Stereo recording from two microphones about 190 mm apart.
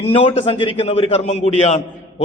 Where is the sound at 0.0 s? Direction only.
30° left (ahead or behind).